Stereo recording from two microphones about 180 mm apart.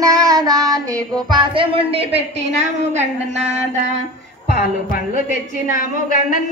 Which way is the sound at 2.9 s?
40° right (ahead or behind).